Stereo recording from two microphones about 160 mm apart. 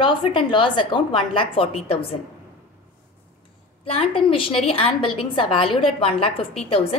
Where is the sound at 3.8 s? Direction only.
35° left (ahead or behind).